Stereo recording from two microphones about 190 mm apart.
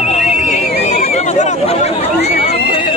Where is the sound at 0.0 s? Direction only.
35° left (ahead or behind).